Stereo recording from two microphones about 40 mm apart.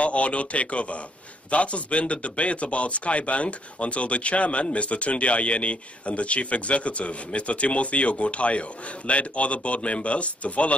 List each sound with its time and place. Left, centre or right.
0.0 s speech: left